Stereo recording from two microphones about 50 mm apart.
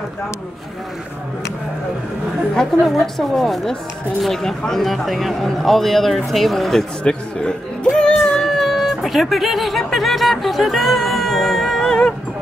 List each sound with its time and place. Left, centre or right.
2.5 s a man's voice: centre
7.0 s a man's voice: centre
7.9 s music: centre
8.5 s music: centre